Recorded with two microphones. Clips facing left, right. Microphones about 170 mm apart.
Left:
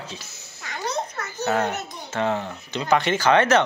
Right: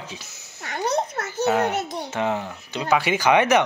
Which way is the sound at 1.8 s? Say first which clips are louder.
Right 7 dB; 90° right.